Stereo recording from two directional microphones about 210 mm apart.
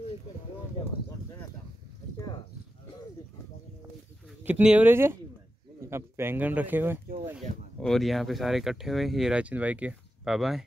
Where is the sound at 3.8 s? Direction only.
10° right (ahead or behind).